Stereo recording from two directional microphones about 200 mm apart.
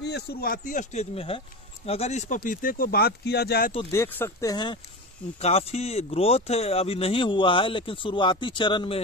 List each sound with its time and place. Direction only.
0.0 s speech: 55° left (ahead or behind)
3.9 s speech: 10° left (ahead or behind)
5.4 s speech: 30° left (ahead or behind)